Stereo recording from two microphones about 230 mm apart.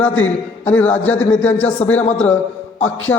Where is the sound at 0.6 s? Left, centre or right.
Centre.